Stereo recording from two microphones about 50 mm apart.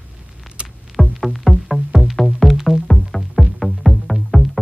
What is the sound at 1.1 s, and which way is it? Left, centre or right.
Music, centre.